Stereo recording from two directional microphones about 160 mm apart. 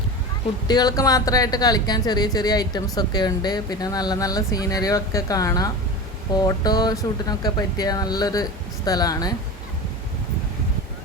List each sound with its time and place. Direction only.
0.7 s speech: 25° left (ahead or behind)